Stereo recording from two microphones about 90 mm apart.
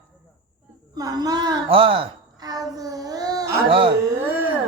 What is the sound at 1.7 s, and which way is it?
Speech, 90° right.